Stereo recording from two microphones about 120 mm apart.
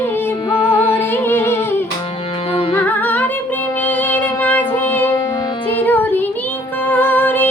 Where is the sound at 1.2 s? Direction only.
20° left (ahead or behind).